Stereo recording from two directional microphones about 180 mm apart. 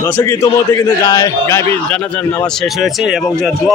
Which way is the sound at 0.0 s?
15° left (ahead or behind).